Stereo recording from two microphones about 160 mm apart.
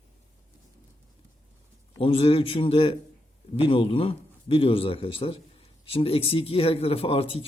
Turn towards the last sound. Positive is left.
turn(degrees=35)  # may be behind; listen again after turning